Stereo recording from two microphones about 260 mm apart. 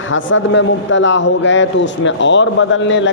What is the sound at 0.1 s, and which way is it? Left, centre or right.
A man's voice, left.